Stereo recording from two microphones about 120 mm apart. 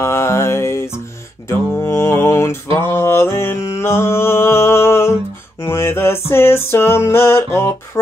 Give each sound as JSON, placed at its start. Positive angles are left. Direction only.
{"t": 0.0, "sound": "music", "side_deg": 20}
{"t": 1.5, "sound": "mantra", "side_deg": 20}
{"t": 5.6, "sound": "music", "side_deg": 20}